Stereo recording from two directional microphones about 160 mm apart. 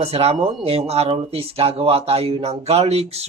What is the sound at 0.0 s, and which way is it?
Speech, 40° right (ahead or behind).